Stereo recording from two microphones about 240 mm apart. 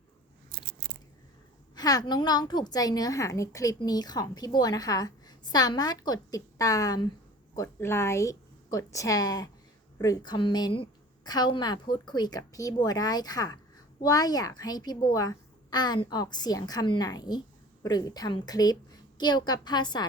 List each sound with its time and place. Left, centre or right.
1.7 s a woman's voice: centre